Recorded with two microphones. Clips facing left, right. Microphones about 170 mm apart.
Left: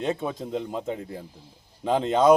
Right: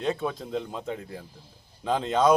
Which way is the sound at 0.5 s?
15° left (ahead or behind).